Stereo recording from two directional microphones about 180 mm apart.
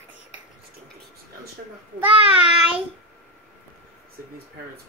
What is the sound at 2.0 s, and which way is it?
Child singing, 5° right (ahead or behind).